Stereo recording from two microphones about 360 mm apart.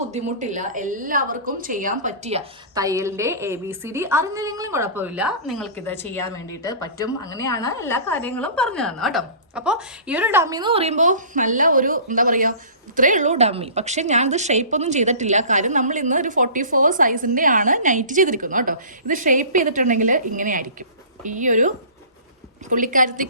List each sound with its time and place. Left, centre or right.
0.1 s a woman's voice: centre
22.7 s a woman's voice: right